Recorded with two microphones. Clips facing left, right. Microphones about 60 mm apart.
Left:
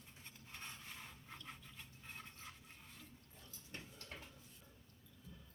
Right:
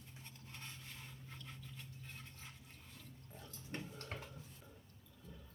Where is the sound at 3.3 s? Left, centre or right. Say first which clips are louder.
Right 7 dB; right.